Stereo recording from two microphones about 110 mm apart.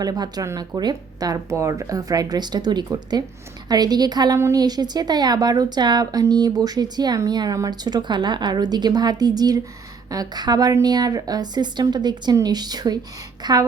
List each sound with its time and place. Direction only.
0.0 s speech: 35° right (ahead or behind)
4.4 s a woman's voice: 25° right (ahead or behind)
4.6 s speech: 40° right (ahead or behind)